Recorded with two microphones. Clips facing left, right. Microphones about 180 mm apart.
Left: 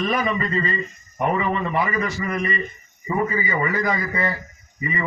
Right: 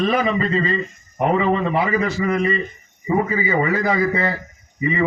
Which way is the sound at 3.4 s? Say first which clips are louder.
Right 4 dB; 30° right (ahead or behind).